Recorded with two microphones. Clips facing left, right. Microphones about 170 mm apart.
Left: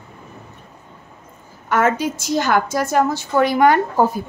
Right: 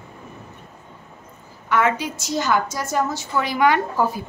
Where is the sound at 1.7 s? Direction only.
45° left (ahead or behind).